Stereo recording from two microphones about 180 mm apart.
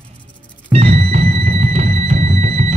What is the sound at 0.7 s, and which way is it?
Music, 35° right (ahead or behind).